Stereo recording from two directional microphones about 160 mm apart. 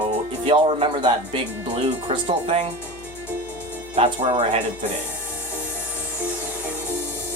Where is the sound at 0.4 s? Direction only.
35° right (ahead or behind).